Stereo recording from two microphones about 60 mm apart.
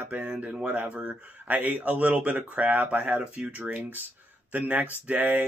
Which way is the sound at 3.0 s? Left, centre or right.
Centre.